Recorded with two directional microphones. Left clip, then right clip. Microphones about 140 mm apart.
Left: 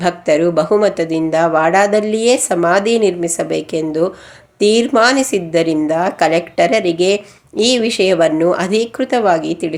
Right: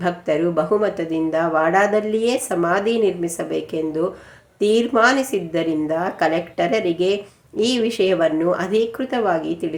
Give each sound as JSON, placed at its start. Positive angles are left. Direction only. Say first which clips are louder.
{"t": 0.0, "sound": "a woman's voice", "louder": "left 7 dB", "side_deg": 35}